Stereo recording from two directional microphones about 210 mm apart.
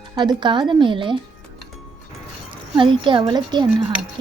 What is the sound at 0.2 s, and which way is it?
Speech, 20° right (ahead or behind).